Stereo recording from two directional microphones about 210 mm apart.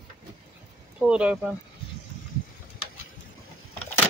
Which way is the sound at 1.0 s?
5° right (ahead or behind).